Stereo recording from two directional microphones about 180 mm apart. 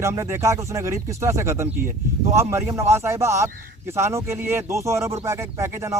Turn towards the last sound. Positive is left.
turn(degrees=-15)  # may be behind; listen again after turning